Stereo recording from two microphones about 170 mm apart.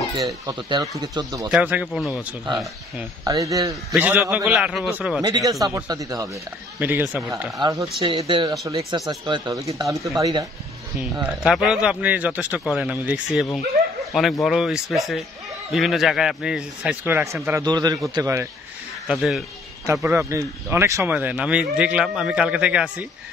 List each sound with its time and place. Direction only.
0.5 s speech: 25° right (ahead or behind)
1.5 s a man's voice: 10° right (ahead or behind)
3.3 s speech: 20° right (ahead or behind)
3.9 s speech: 5° right (ahead or behind)
5.2 s speech: 20° right (ahead or behind)
8.0 s speech: 30° right (ahead or behind)
11.2 s a man's voice: centre (ahead or behind)
19.0 s a man's voice: centre (ahead or behind)
19.9 s speech: 15° right (ahead or behind)